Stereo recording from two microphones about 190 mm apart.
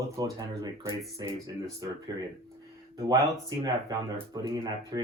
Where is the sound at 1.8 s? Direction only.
20° right (ahead or behind).